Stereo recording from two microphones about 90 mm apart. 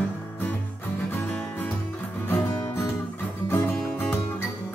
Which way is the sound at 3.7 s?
10° left (ahead or behind).